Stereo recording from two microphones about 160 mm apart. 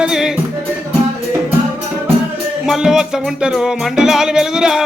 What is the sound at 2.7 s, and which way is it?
Music, 5° right (ahead or behind).